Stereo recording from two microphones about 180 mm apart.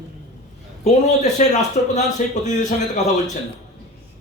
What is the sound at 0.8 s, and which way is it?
A man's voice, 40° left (ahead or behind).